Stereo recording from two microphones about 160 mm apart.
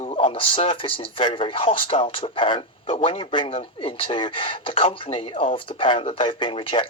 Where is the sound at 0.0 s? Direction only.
40° left (ahead or behind).